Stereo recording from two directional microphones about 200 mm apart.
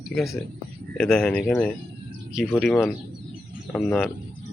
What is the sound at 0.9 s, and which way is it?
Speech, centre (ahead or behind).